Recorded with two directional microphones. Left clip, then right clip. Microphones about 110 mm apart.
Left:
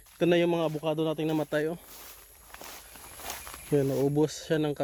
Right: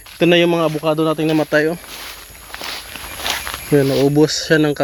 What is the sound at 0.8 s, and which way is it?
Speech, 65° left (ahead or behind).